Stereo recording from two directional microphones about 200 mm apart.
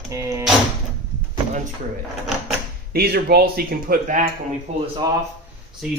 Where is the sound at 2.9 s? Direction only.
50° right (ahead or behind).